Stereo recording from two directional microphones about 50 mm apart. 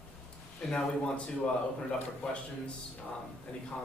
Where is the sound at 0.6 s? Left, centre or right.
Centre.